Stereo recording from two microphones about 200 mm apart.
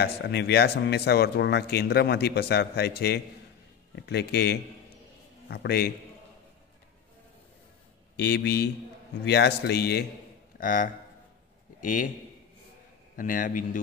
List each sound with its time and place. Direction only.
0.0 s speech: 55° left (ahead or behind)
8.2 s speech: 55° left (ahead or behind)
10.6 s a man's voice: 45° left (ahead or behind)
13.1 s speech: 45° left (ahead or behind)